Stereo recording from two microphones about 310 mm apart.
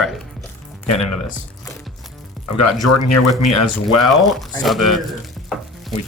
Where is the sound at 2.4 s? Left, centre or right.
Left.